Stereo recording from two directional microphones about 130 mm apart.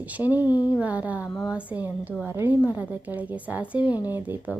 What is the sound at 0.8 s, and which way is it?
Speech, 10° right (ahead or behind).